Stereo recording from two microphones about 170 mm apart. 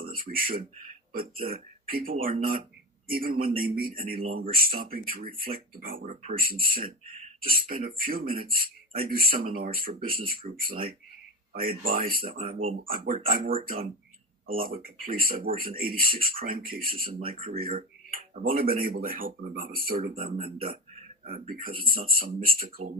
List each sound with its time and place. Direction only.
0.1 s a sound: 55° right (ahead or behind)
1.1 s speech: 60° right (ahead or behind)
20.3 s speech: 35° right (ahead or behind)
20.6 s speech: 55° right (ahead or behind)